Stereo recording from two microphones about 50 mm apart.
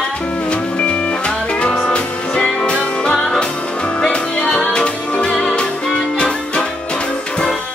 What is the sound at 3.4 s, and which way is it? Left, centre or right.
Music, left.